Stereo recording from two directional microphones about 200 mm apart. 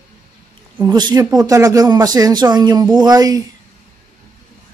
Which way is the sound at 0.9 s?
20° right (ahead or behind).